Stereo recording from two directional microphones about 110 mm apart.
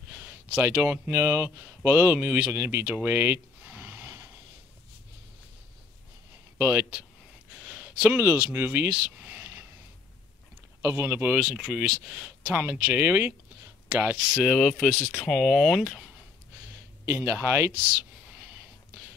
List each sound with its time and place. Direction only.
0.1 s speech: 20° right (ahead or behind)
3.1 s a sound: 20° right (ahead or behind)
6.6 s speech: 20° right (ahead or behind)
7.6 s a sound: 15° right (ahead or behind)
10.8 s speech: 25° right (ahead or behind)
11.3 s speech: 5° right (ahead or behind)
12.4 s speech: 15° right (ahead or behind)
14.3 s speech: 5° left (ahead or behind)
15.2 s speech: centre (ahead or behind)
17.0 s speech: 20° right (ahead or behind)